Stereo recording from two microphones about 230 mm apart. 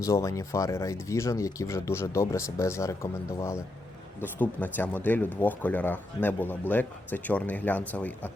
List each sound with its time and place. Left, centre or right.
0.0 s speech: centre